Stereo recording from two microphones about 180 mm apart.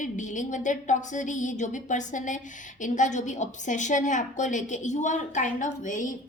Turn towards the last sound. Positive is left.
turn(degrees=45)  # may be behind; listen again after turning